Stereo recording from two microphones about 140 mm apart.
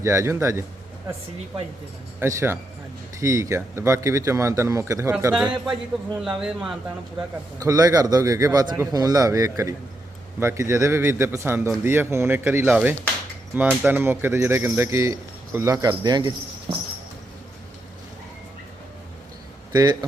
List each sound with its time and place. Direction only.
0.0 s speech: 20° right (ahead or behind)
2.1 s speech: 15° right (ahead or behind)
5.3 s speech: 5° right (ahead or behind)
7.6 s speech: 25° right (ahead or behind)
19.7 s speech: 30° right (ahead or behind)